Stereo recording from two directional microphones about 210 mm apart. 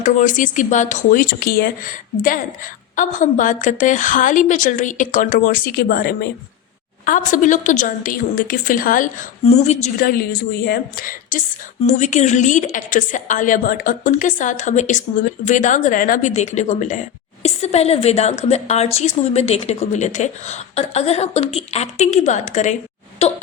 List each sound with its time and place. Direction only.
0.0 s a woman's voice: 40° left (ahead or behind)